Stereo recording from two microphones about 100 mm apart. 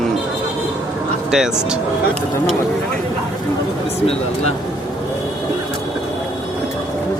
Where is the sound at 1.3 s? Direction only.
5° right (ahead or behind).